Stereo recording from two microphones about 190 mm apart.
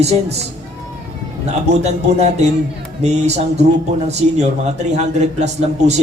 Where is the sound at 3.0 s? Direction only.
35° right (ahead or behind).